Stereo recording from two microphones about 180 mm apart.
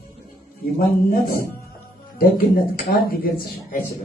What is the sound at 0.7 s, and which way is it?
A man's voice, 55° left (ahead or behind).